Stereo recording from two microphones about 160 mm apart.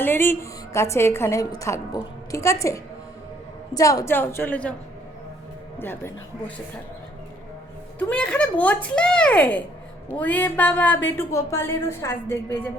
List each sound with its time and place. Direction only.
0.0 s a woman's voice: 15° left (ahead or behind)
5.8 s a woman's voice: 15° left (ahead or behind)
7.9 s a woman's voice: 10° left (ahead or behind)